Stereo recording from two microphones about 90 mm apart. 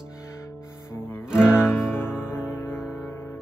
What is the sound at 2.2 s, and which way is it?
Music, 25° left (ahead or behind).